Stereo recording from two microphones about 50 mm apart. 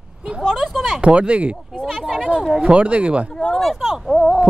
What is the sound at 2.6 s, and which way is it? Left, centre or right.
Speech, right.